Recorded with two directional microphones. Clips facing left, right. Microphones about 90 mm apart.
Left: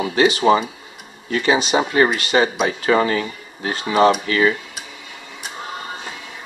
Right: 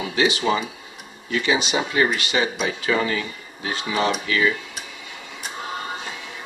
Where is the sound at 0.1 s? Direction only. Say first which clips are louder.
Left 6 dB; 45° left (ahead or behind).